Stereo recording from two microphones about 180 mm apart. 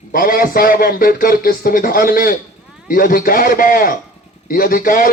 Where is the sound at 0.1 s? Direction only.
55° left (ahead or behind).